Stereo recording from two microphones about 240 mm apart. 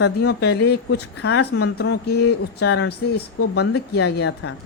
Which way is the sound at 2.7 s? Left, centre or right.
Left.